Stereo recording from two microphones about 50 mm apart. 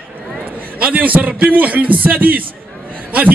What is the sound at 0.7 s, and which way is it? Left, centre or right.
A man's voice, right.